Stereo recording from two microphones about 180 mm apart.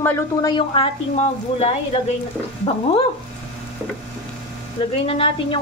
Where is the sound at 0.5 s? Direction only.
30° left (ahead or behind).